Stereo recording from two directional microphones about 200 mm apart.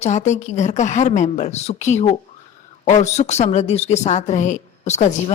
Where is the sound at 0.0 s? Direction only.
35° left (ahead or behind).